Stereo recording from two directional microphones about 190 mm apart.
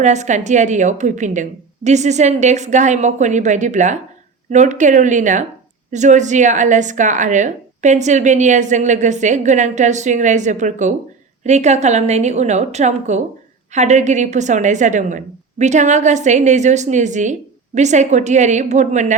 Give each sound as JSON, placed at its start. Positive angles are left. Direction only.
{"t": 0.0, "sound": "a woman's voice", "side_deg": -40}